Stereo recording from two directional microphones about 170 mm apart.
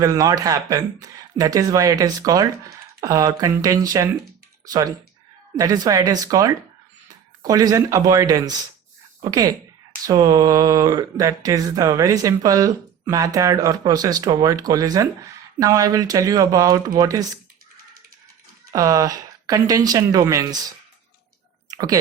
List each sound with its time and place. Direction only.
0.0 s speech: 20° right (ahead or behind)
18.7 s speech: 20° right (ahead or behind)
21.7 s a sound: 20° right (ahead or behind)